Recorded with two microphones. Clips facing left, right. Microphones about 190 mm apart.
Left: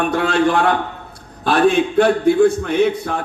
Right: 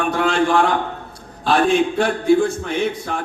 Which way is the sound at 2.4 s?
60° left (ahead or behind).